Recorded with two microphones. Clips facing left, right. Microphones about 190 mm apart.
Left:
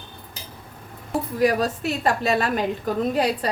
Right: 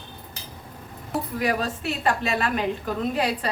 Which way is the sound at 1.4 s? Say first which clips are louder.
Left 7 dB; 40° left (ahead or behind).